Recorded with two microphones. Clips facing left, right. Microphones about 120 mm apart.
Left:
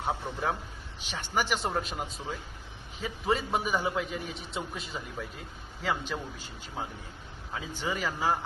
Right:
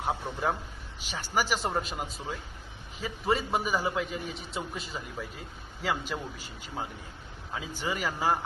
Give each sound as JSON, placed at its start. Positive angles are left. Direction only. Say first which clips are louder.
{"t": 0.0, "sound": "a man's voice", "louder": "right 1 dB", "side_deg": 0}
{"t": 7.5, "sound": "speech", "louder": "even", "side_deg": -10}